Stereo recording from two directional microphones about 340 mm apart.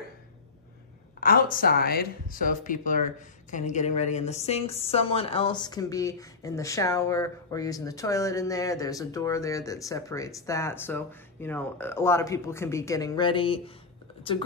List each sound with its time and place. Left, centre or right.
1.2 s a woman's voice: left